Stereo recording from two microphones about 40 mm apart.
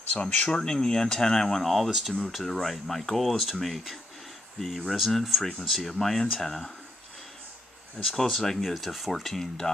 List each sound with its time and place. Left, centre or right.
0.1 s speech: left
1.7 s speech: centre
2.3 s speech: centre
8.2 s speech: centre